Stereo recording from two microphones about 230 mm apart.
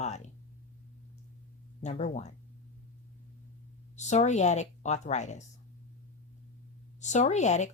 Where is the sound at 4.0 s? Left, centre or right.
Left.